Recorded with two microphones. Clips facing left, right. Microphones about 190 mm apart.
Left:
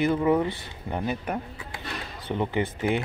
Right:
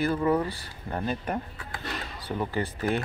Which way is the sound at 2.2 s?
20° left (ahead or behind).